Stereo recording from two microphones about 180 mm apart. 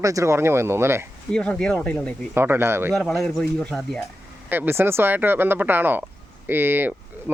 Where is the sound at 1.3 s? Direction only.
5° left (ahead or behind).